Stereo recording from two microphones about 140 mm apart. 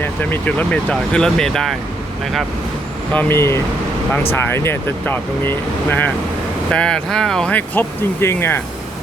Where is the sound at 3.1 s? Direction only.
15° left (ahead or behind).